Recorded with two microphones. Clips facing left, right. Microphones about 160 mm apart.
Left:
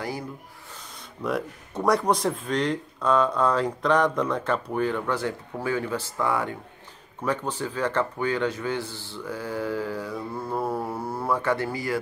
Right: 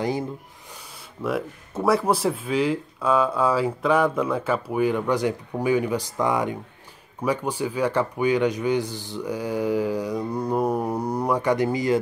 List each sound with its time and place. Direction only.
1.2 s speech: 5° right (ahead or behind); by 12.0 s 20° right (ahead or behind)